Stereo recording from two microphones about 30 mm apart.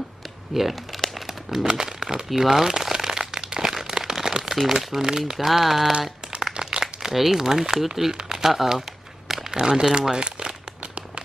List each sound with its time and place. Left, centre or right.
0.6 s crumpling: centre
1.7 s speech: centre
2.7 s crumpling: centre
3.6 s a sound: centre
4.0 s crumpling: centre
4.9 s speech: centre
5.4 s speech: centre
6.5 s a sound: right
7.2 s speech: centre
8.1 s speech: right
9.3 s a sound: centre
9.6 s speech: right
10.1 s crumpling: right